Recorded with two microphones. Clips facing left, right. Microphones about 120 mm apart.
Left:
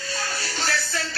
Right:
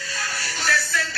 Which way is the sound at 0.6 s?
30° left (ahead or behind).